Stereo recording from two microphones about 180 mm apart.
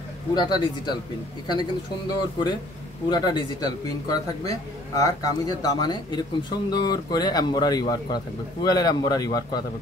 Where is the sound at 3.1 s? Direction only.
25° left (ahead or behind).